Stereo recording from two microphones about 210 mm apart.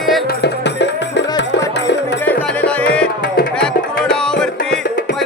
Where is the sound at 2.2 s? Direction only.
10° left (ahead or behind).